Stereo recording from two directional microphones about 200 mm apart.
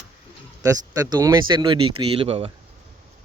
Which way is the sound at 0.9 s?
20° right (ahead or behind).